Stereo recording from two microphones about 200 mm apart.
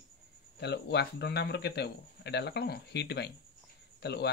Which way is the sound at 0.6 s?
55° left (ahead or behind).